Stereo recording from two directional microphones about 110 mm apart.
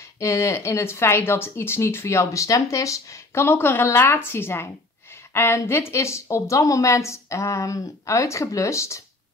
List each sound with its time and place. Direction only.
0.2 s speech: 25° left (ahead or behind)